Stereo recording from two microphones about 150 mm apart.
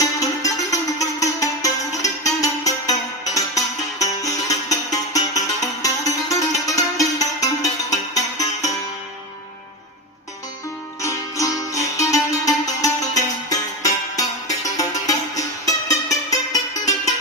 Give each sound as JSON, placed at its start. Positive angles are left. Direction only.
{"t": 0.0, "sound": "music", "side_deg": 20}
{"t": 11.0, "sound": "music", "side_deg": 20}